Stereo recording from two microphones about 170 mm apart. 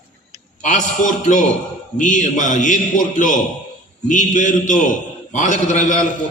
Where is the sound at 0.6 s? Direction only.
50° left (ahead or behind).